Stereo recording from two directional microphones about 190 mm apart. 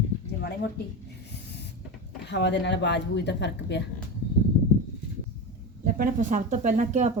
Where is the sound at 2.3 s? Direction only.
65° left (ahead or behind).